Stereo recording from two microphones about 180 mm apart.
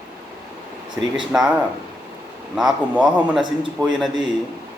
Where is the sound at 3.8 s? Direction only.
25° right (ahead or behind).